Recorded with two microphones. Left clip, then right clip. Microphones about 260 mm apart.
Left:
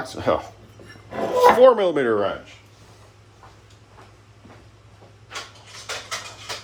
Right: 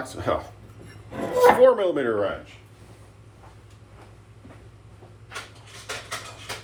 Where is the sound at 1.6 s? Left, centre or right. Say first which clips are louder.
Left 3 dB; left.